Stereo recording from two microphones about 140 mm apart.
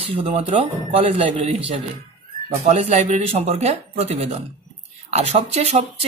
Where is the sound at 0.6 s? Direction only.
45° right (ahead or behind).